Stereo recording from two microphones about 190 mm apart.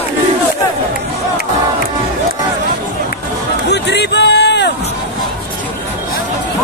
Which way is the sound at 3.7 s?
65° left (ahead or behind).